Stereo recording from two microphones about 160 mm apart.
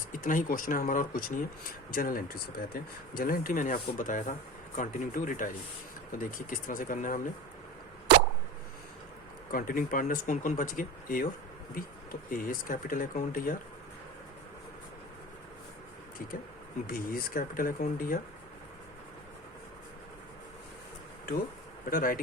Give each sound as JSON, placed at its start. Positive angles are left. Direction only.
{"t": 0.1, "sound": "speech", "side_deg": 55}
{"t": 9.5, "sound": "speech", "side_deg": 60}
{"t": 12.3, "sound": "speech", "side_deg": 60}
{"t": 16.8, "sound": "speech", "side_deg": 65}
{"t": 21.8, "sound": "speech", "side_deg": 60}